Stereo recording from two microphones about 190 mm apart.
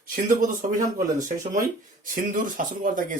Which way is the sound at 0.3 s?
45° right (ahead or behind).